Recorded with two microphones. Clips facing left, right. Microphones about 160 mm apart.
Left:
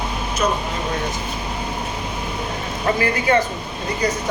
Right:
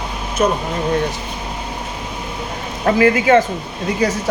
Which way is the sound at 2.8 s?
90° right.